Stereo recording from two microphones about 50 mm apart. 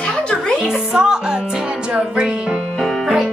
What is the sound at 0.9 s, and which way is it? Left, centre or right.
Music, centre.